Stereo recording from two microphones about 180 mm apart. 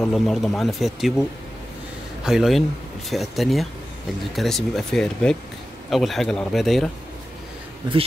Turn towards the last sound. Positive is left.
turn(degrees=-25)  # may be behind; listen again after turning